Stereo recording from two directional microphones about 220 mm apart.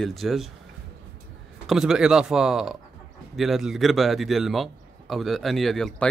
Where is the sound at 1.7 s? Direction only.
Centre (ahead or behind).